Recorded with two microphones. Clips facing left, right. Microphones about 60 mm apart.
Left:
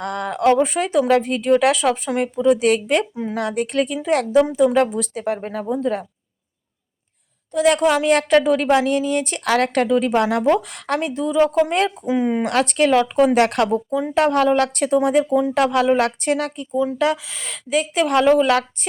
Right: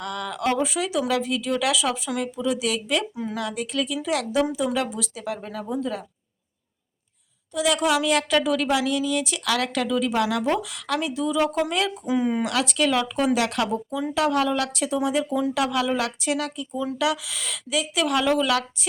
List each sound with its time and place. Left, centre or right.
0.0 s a sound: left
0.6 s speech: left
7.5 s a woman's voice: left
12.4 s speech: left
15.3 s speech: left
16.7 s a woman's voice: left